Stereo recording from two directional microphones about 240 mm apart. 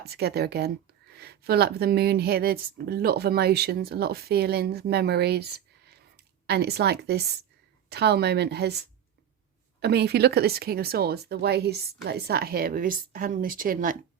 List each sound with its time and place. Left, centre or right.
0.1 s speech: right
9.8 s speech: right